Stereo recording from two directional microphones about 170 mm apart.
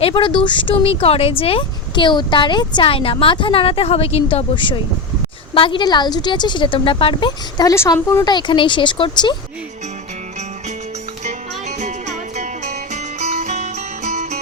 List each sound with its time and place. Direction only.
0.0 s a woman's voice: 30° left (ahead or behind)
11.8 s music: 45° right (ahead or behind)